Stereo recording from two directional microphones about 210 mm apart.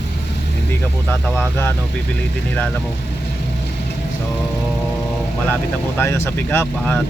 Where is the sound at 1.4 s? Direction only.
10° left (ahead or behind).